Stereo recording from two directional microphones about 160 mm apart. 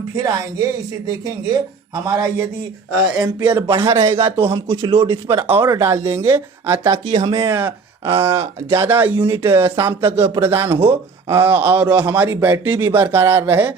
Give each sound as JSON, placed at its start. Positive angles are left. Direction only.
{"t": 0.2, "sound": "speech", "side_deg": -20}
{"t": 4.5, "sound": "speech", "side_deg": -25}
{"t": 5.5, "sound": "speech", "side_deg": -15}